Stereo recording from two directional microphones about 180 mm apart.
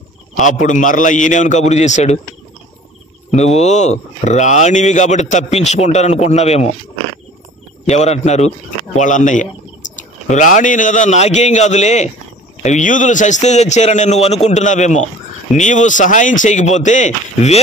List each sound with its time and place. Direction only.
0.4 s speech: 45° left (ahead or behind)
3.3 s speech: 35° left (ahead or behind)
7.8 s a man's voice: 40° left (ahead or behind)